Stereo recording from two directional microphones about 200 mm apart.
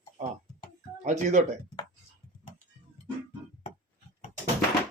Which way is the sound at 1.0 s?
35° right (ahead or behind).